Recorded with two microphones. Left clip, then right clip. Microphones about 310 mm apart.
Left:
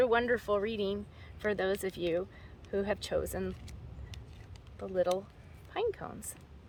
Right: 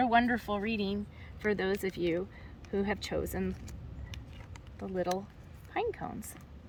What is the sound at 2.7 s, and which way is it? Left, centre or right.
Speech, centre.